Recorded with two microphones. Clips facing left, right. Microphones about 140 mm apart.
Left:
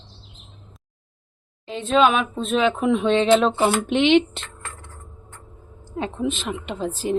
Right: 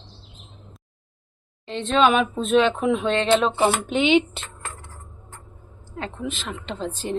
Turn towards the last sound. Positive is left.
turn(degrees=5)  # may be behind; listen again after turning